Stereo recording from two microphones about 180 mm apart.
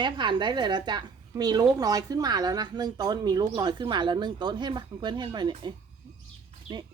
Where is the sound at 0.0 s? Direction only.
25° right (ahead or behind).